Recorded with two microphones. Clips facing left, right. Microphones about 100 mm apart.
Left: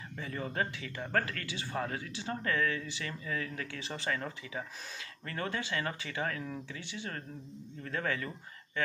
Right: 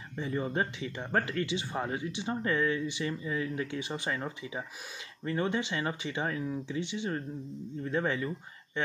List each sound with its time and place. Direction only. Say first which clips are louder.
0.2 s speech: right 4 dB; 20° right (ahead or behind)